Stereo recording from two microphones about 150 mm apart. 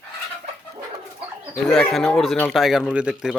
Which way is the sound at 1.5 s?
5° left (ahead or behind).